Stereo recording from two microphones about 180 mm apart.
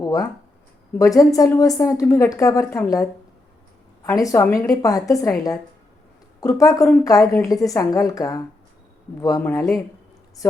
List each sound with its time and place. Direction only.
0.0 s a woman's voice: 20° left (ahead or behind)